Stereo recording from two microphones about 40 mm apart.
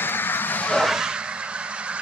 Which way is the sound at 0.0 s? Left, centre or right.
Left.